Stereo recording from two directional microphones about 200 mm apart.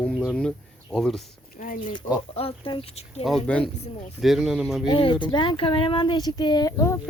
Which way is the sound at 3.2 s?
5° left (ahead or behind).